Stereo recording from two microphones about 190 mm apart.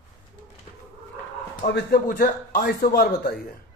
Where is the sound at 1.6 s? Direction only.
55° left (ahead or behind).